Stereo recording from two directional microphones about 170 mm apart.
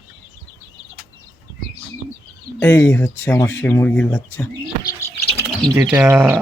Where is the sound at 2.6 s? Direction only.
10° left (ahead or behind).